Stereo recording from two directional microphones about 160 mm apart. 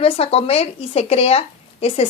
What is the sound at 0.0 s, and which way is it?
A woman's voice, 35° left (ahead or behind).